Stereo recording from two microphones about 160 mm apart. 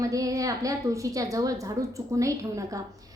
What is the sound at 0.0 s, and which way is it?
A woman's voice, 20° right (ahead or behind).